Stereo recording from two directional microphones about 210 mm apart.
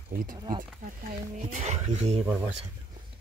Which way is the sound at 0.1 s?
45° right (ahead or behind).